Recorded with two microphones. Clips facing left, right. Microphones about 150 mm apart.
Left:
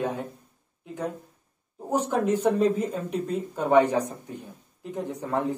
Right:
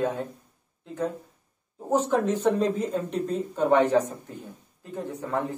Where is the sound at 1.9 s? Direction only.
10° left (ahead or behind).